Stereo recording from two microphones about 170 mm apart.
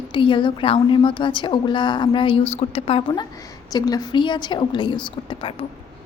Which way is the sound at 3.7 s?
25° left (ahead or behind).